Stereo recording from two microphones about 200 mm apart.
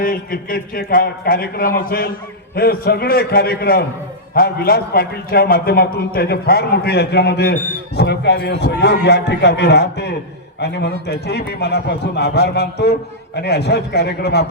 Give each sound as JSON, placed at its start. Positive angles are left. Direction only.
{"t": 0.0, "sound": "a man's voice", "side_deg": 45}